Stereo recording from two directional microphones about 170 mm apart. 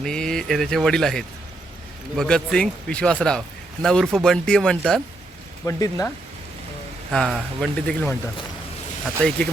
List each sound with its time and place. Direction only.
0.0 s speech: 5° left (ahead or behind)
5.6 s speech: 20° left (ahead or behind)
7.1 s speech: centre (ahead or behind)